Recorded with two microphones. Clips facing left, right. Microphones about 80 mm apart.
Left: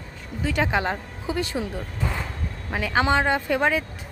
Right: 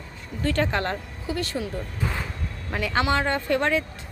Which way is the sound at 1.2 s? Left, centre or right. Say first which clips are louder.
Left 2 dB; left.